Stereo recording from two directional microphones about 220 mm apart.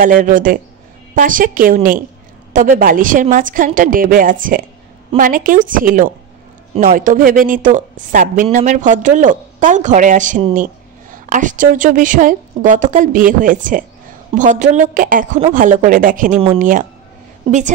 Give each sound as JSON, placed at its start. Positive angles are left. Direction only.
{"t": 0.0, "sound": "a woman's voice", "side_deg": -40}
{"t": 16.3, "sound": "a woman's voice", "side_deg": -25}